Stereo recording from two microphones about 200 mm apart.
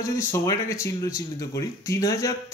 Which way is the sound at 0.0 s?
15° left (ahead or behind).